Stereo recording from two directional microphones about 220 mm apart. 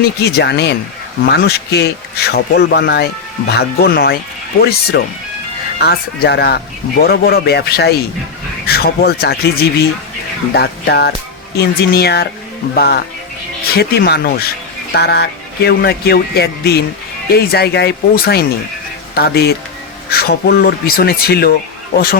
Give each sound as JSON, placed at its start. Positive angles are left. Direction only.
{"t": 0.0, "sound": "speech", "side_deg": 45}